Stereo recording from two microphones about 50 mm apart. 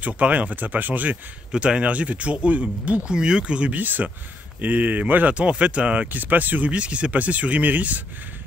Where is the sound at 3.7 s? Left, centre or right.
Right.